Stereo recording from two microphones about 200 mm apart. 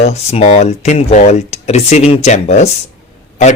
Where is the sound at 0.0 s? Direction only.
35° left (ahead or behind).